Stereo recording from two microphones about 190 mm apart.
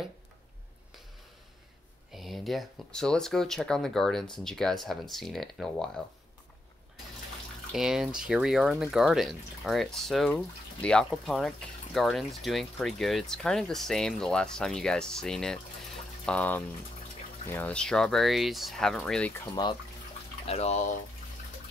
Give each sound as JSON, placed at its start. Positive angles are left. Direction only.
{"t": 2.1, "sound": "speech", "side_deg": 0}
{"t": 7.7, "sound": "speech", "side_deg": 0}
{"t": 19.4, "sound": "speech", "side_deg": 20}
{"t": 20.4, "sound": "speech", "side_deg": 35}